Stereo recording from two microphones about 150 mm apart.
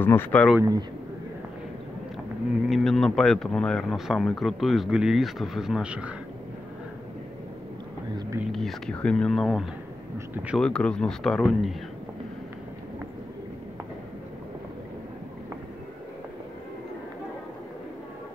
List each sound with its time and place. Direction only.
0.0 s speech: 15° left (ahead or behind)
0.6 s a man's voice: 25° right (ahead or behind)
2.7 s speech: centre (ahead or behind)
8.5 s speech: centre (ahead or behind)
10.1 s speech: 10° right (ahead or behind)
10.6 s speech: 5° left (ahead or behind)